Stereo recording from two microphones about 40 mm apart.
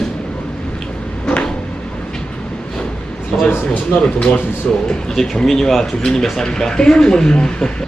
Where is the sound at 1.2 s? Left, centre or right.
Left.